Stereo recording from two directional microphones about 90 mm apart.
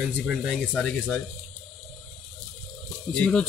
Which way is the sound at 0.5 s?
5° left (ahead or behind).